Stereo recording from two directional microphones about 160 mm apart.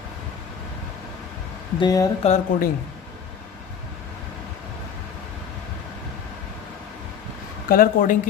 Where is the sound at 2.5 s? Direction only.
55° left (ahead or behind).